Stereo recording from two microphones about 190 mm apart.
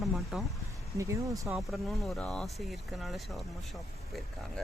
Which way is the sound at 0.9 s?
15° right (ahead or behind).